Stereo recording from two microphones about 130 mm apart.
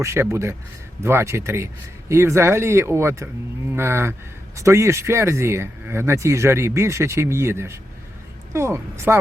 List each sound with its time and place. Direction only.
0.0 s speech: 20° right (ahead or behind)